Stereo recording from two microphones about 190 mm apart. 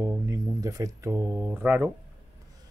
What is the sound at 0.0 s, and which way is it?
Mantra, 15° right (ahead or behind).